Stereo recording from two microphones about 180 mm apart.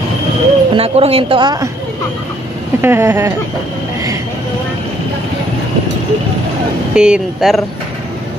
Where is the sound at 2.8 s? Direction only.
15° right (ahead or behind).